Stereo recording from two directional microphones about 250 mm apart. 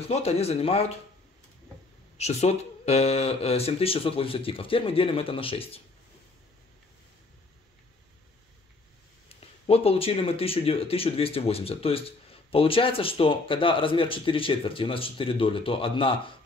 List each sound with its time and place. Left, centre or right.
0.0 s speech: left
2.1 s speech: left
9.3 s speech: left